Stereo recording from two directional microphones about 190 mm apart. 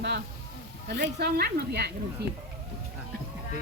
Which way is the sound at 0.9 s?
60° right (ahead or behind).